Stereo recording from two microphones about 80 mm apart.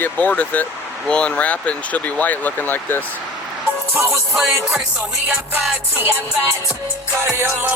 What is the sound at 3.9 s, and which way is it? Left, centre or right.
Music, right.